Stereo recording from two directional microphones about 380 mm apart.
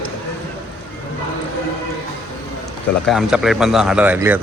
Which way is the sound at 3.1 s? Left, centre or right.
Centre.